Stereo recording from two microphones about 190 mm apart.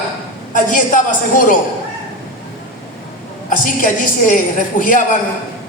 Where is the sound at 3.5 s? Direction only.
45° left (ahead or behind).